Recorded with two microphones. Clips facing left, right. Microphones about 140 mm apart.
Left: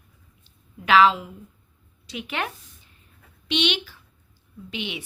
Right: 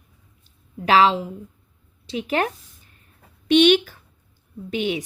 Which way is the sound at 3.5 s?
50° right (ahead or behind).